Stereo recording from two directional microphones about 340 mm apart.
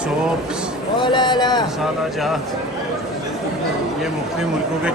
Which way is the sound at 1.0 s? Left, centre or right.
Centre.